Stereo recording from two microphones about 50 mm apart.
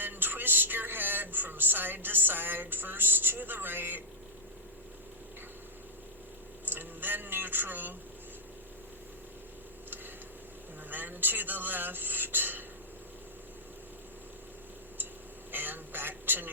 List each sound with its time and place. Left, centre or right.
0.0 s music: right
6.7 s speech: right
10.8 s speech: right
15.5 s a sound: right